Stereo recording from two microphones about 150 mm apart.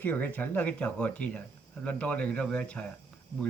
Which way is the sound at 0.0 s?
10° left (ahead or behind).